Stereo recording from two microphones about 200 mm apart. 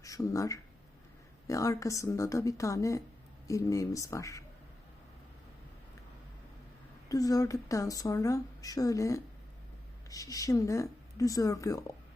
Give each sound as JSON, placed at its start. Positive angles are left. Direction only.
{"t": 0.0, "sound": "speech", "side_deg": 15}
{"t": 7.1, "sound": "speech", "side_deg": 15}